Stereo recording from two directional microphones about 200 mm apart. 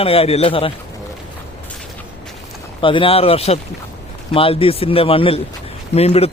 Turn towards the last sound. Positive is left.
turn(degrees=30)  # may be behind; listen again after turning